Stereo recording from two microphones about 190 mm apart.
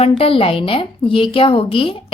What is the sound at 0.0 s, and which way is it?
A woman's voice, 30° left (ahead or behind).